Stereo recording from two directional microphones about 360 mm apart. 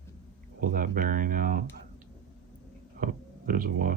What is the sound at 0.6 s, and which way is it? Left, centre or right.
Speech, right.